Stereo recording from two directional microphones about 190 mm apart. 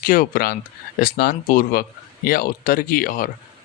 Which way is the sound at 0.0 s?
50° left (ahead or behind).